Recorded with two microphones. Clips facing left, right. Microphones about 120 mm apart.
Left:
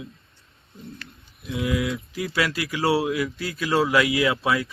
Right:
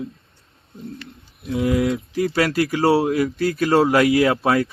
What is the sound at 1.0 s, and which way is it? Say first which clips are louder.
Speech: right 6 dB; 30° right (ahead or behind).